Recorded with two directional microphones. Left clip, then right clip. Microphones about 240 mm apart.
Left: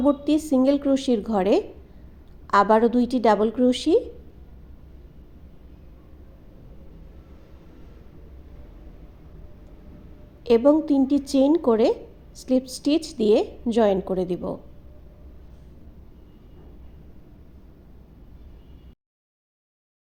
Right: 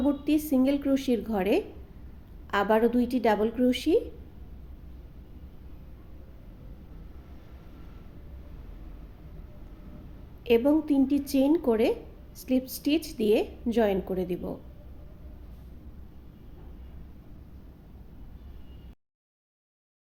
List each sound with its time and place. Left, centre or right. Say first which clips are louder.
0.0 s a woman's voice: left 5 dB; centre
10.4 s a woman's voice: left 6 dB; centre